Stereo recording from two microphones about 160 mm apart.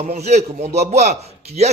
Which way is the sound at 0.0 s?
45° right (ahead or behind).